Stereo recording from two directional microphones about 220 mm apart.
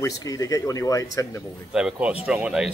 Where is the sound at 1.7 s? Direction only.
5° right (ahead or behind).